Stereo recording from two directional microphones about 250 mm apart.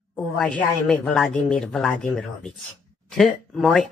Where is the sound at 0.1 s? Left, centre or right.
Centre.